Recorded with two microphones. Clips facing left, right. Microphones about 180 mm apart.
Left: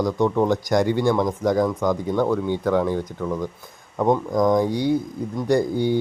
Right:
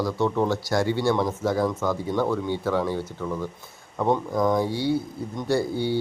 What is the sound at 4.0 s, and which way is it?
Speech, 15° left (ahead or behind).